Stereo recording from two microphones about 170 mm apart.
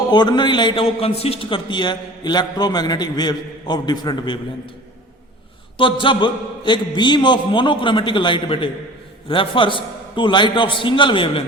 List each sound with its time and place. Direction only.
0.1 s a man's voice: 25° left (ahead or behind)
5.7 s a man's voice: 30° left (ahead or behind)